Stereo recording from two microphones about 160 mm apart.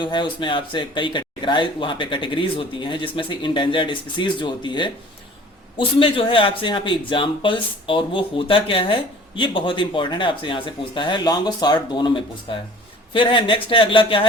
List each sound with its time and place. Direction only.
0.0 s speech: 30° left (ahead or behind)